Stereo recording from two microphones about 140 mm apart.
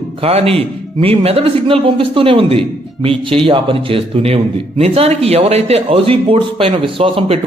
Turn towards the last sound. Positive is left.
turn(degrees=-40)  # may be behind; listen again after turning